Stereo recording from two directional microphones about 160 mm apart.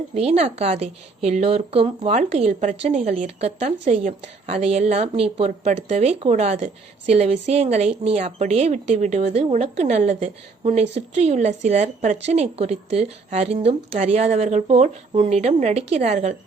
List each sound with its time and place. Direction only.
0.1 s a woman's voice: 40° right (ahead or behind)